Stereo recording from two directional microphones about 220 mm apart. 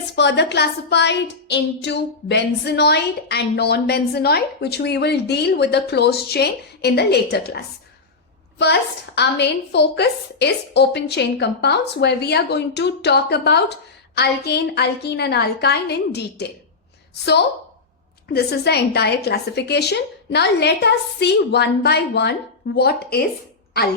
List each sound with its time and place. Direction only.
0.2 s a woman's voice: 50° left (ahead or behind)
9.1 s a woman's voice: 50° left (ahead or behind)
18.3 s a woman's voice: 45° left (ahead or behind)